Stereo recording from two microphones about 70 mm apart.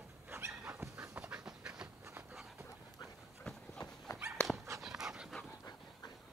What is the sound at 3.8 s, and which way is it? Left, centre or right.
Dog, left.